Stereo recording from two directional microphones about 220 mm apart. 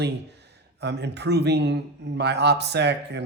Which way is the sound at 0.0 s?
50° right (ahead or behind).